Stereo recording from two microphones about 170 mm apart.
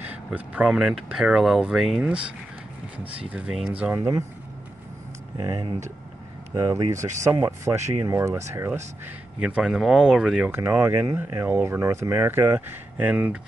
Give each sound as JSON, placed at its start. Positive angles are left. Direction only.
{"t": 0.0, "sound": "speech", "side_deg": -10}
{"t": 5.4, "sound": "speech", "side_deg": -20}
{"t": 9.6, "sound": "speech", "side_deg": 0}